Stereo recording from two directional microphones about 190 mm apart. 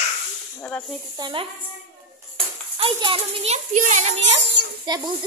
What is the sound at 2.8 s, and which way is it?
Speech, 25° right (ahead or behind).